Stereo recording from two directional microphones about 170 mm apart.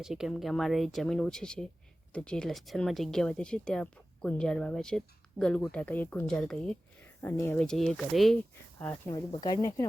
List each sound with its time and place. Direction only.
0.0 s speech: centre (ahead or behind); by 9.8 s 20° left (ahead or behind)